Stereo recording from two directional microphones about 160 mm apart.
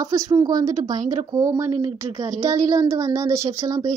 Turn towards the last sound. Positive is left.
turn(degrees=-20)  # may be behind; listen again after turning